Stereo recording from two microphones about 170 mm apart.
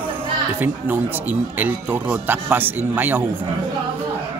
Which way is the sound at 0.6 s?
10° right (ahead or behind).